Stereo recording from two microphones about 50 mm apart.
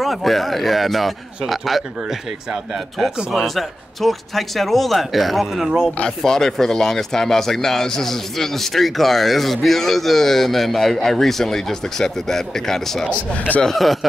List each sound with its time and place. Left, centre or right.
0.0 s speech: centre
3.4 s speech: centre
6.0 s speech: centre